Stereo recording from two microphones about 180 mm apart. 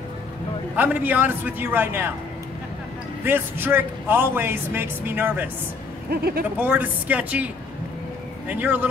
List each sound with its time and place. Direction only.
0.7 s a man's voice: 10° right (ahead or behind)
3.3 s a man's voice: 10° right (ahead or behind)
6.0 s speech: 60° right (ahead or behind)
6.6 s a man's voice: 10° right (ahead or behind)